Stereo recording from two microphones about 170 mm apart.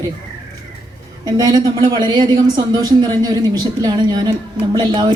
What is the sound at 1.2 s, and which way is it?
Speech, 25° right (ahead or behind).